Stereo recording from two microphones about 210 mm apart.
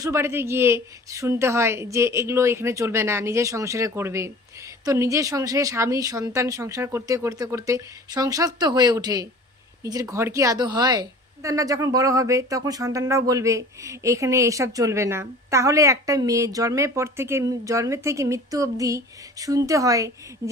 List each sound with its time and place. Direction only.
0.0 s speech: 10° right (ahead or behind)